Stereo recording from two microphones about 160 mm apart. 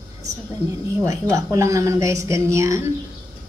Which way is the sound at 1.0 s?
20° right (ahead or behind).